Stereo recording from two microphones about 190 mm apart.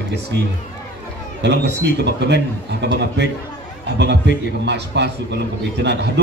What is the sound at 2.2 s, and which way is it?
A man's voice, 65° right (ahead or behind).